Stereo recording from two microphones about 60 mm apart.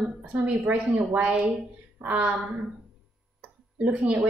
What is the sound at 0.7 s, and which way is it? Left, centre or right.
Speech, right.